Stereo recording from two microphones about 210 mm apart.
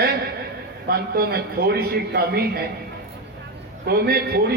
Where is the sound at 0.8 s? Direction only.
45° right (ahead or behind).